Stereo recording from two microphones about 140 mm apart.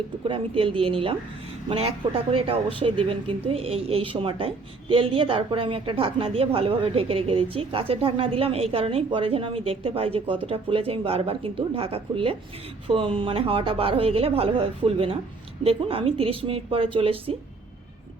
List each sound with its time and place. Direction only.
0.3 s speech: 40° right (ahead or behind)